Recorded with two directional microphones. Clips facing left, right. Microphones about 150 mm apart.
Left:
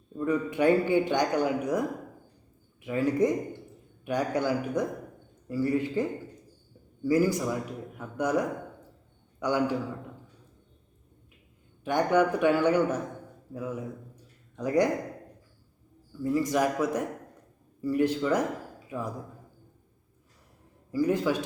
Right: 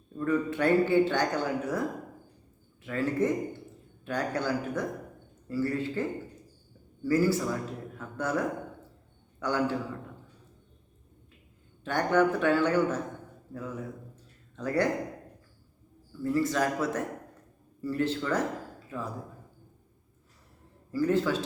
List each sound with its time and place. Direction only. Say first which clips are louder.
0.2 s speech: left 1 dB; 15° left (ahead or behind)
2.8 s speech: left 3 dB; 15° left (ahead or behind)
11.9 s speech: left 1 dB; 15° left (ahead or behind)
16.2 s speech: left 1 dB; 15° left (ahead or behind)
20.9 s speech: left 1 dB; 15° left (ahead or behind)